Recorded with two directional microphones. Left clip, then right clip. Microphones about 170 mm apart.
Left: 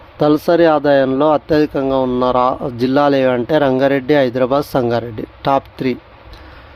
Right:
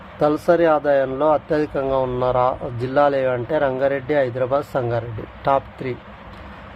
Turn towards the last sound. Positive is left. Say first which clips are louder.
# left 4 dB
turn(degrees=75)  # may be behind; listen again after turning